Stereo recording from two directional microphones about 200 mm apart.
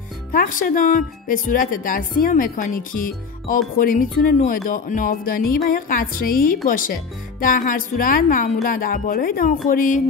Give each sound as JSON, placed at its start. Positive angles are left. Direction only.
{"t": 0.3, "sound": "speech", "side_deg": 40}